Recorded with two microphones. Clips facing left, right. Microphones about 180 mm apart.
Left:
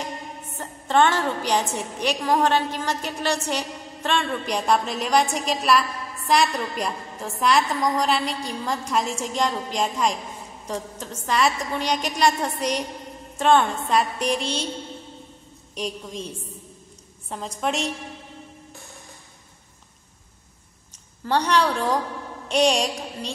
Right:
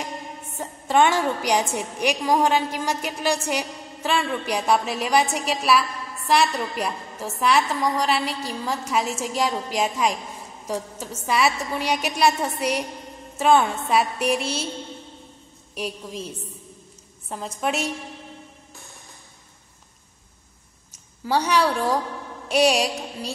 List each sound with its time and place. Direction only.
0.6 s a woman's voice: 10° right (ahead or behind)
15.7 s a woman's voice: 5° right (ahead or behind)
21.2 s a woman's voice: 5° right (ahead or behind)